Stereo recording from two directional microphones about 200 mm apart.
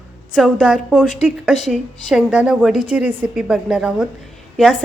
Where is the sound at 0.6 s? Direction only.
5° right (ahead or behind).